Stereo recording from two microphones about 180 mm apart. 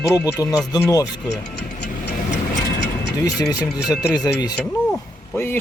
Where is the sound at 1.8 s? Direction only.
70° left (ahead or behind).